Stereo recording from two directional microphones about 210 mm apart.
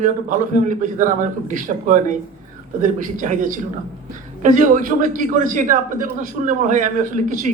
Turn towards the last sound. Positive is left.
turn(degrees=-40)  # may be behind; listen again after turning